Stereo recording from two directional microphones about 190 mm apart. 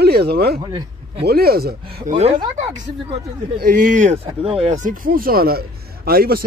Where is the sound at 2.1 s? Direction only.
35° right (ahead or behind).